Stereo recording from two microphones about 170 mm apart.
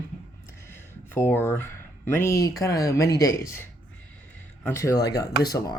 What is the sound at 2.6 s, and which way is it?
Speech, 20° left (ahead or behind).